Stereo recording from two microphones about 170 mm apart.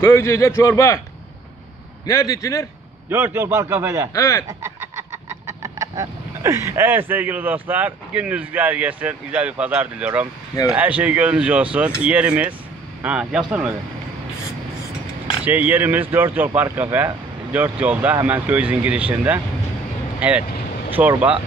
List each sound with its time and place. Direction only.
0.0 s a man's voice: 15° left (ahead or behind)
2.0 s a man's voice: 20° left (ahead or behind)
3.1 s speech: 15° right (ahead or behind)
4.1 s a man's voice: 20° left (ahead or behind)
4.5 s chicken: 15° right (ahead or behind)
10.7 s speech: 10° right (ahead or behind)
15.4 s speech: 10° right (ahead or behind)